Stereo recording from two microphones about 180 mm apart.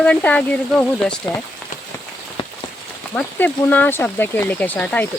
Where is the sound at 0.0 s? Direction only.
5° left (ahead or behind).